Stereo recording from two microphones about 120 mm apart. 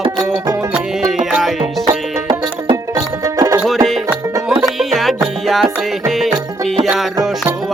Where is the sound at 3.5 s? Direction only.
Centre (ahead or behind).